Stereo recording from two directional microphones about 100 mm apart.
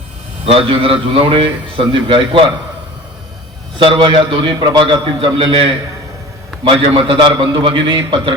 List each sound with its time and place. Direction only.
0.4 s a man's voice: 65° right (ahead or behind)
3.8 s a man's voice: 55° right (ahead or behind)